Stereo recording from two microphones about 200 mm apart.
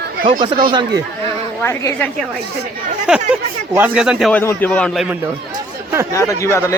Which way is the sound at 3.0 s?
5° right (ahead or behind).